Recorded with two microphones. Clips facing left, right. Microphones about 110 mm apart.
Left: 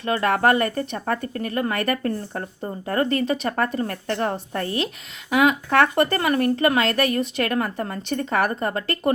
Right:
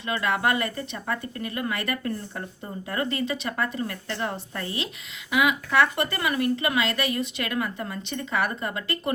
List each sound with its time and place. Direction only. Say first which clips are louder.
0.0 s speech: left 5 dB; 45° left (ahead or behind)